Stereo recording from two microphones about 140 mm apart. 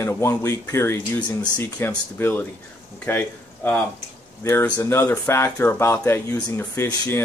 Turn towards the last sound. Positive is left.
turn(degrees=15)  # may be behind; listen again after turning